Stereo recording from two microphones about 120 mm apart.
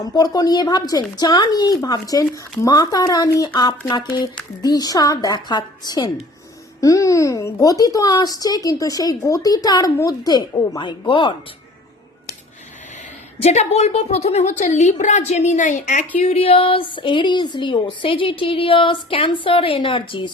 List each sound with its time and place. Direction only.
0.0 s a woman's voice: 30° left (ahead or behind)
10.8 s a woman's voice: 40° left (ahead or behind)
13.4 s a woman's voice: 60° left (ahead or behind); by 16.0 s 90° left
16.2 s a woman's voice: 55° left (ahead or behind)